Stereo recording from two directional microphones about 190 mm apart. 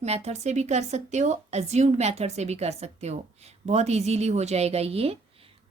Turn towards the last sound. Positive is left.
turn(degrees=-30)  # may be behind; listen again after turning